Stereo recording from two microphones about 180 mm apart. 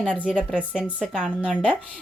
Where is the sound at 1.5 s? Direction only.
5° left (ahead or behind).